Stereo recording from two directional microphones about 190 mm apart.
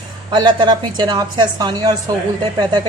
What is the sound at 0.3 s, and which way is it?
A woman's voice, 20° right (ahead or behind).